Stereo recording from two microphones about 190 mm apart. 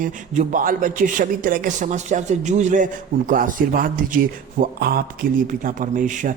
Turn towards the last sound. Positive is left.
turn(degrees=-45)  # may be behind; listen again after turning